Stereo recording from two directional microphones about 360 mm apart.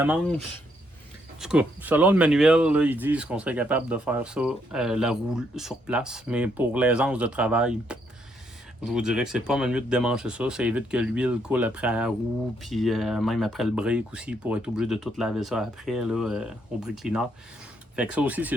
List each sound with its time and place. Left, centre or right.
0.0 s speech: centre